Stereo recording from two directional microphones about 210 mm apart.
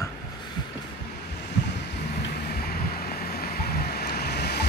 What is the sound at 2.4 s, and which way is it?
Vehicle, 45° left (ahead or behind).